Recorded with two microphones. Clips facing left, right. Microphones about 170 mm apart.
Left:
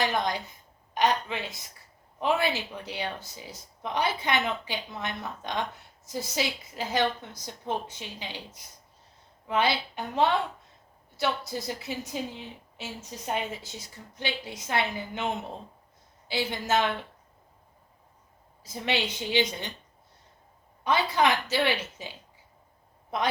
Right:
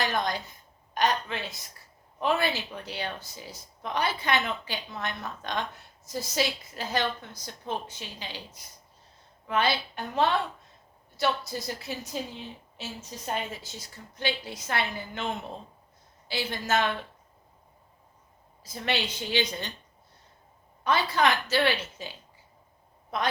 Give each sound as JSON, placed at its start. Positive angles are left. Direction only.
{"t": 0.0, "sound": "a woman's voice", "side_deg": 20}
{"t": 9.5, "sound": "a woman's voice", "side_deg": 15}
{"t": 16.3, "sound": "a woman's voice", "side_deg": 20}
{"t": 18.7, "sound": "a woman's voice", "side_deg": 20}
{"t": 20.8, "sound": "a woman's voice", "side_deg": 15}